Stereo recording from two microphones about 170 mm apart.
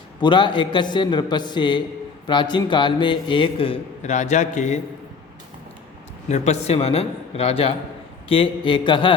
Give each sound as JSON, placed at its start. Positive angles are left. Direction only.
{"t": 0.2, "sound": "a man's voice", "side_deg": 30}
{"t": 6.2, "sound": "a man's voice", "side_deg": 40}